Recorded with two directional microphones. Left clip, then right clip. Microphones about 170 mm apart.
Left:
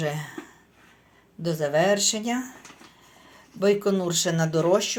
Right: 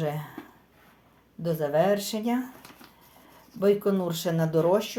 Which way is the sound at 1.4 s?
Centre (ahead or behind).